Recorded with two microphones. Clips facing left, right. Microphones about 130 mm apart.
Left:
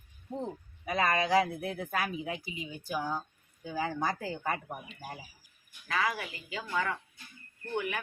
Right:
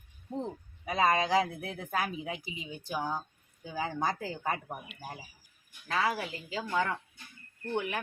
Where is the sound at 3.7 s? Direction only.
20° right (ahead or behind).